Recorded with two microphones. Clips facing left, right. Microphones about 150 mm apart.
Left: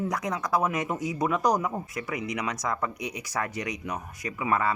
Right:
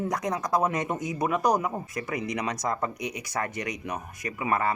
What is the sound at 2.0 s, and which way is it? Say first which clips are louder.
Speech: right 2 dB; 35° right (ahead or behind).